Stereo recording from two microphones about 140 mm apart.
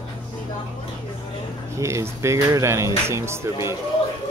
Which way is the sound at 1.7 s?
20° right (ahead or behind).